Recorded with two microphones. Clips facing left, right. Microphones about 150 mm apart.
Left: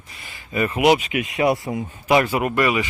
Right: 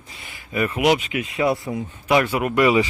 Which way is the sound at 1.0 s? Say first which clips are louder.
Left 2 dB; 75° left (ahead or behind).